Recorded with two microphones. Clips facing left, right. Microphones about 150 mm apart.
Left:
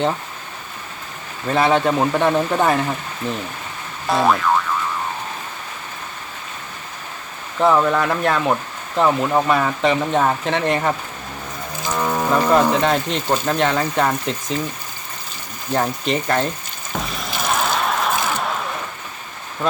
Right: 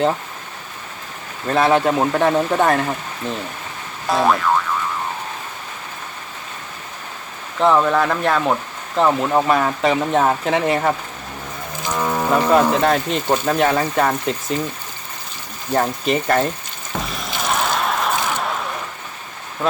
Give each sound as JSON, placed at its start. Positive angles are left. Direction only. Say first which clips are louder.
{"t": 1.5, "sound": "speech", "louder": "right 1 dB", "side_deg": 0}
{"t": 4.1, "sound": "speech", "louder": "even", "side_deg": 0}
{"t": 7.6, "sound": "speech", "louder": "right 1 dB", "side_deg": 0}
{"t": 11.9, "sound": "cattle", "louder": "even", "side_deg": 0}
{"t": 13.2, "sound": "speech", "louder": "right 1 dB", "side_deg": -15}
{"t": 13.5, "sound": "speech", "louder": "right 2 dB", "side_deg": -5}
{"t": 15.7, "sound": "speech", "louder": "right 2 dB", "side_deg": -5}
{"t": 16.9, "sound": "a sound", "louder": "even", "side_deg": 0}